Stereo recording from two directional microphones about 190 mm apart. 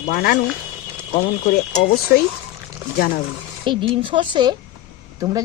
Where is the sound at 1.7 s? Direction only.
40° left (ahead or behind).